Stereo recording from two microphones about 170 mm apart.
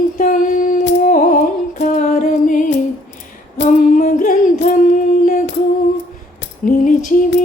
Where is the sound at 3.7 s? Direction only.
50° left (ahead or behind).